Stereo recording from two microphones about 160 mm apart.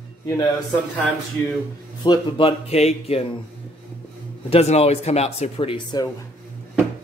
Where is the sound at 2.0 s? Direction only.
30° left (ahead or behind).